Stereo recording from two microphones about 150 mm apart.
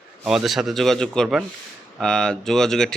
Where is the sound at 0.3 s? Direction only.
Centre (ahead or behind).